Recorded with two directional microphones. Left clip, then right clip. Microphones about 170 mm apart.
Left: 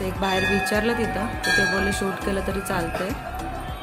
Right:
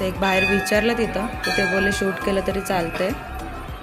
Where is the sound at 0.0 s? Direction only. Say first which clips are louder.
Right 4 dB; 15° right (ahead or behind).